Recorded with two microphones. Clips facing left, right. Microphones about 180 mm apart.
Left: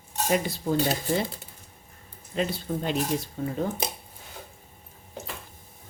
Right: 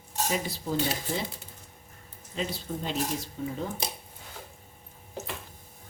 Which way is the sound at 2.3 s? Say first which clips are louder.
Left 5 dB; 60° left (ahead or behind).